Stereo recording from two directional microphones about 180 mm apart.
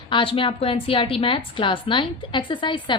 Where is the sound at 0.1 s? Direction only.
30° left (ahead or behind).